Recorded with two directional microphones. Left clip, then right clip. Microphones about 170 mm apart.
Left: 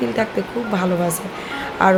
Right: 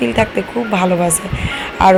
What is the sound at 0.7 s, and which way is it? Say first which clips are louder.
Speech: right 6 dB; 15° right (ahead or behind).